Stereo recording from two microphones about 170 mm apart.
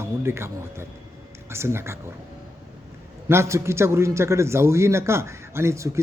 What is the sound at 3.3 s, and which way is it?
A man's voice, 15° right (ahead or behind).